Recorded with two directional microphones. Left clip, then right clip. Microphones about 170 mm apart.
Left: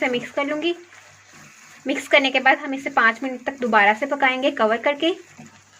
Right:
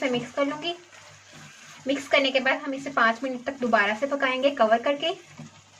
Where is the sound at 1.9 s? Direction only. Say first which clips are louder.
Left 4 dB; 45° left (ahead or behind).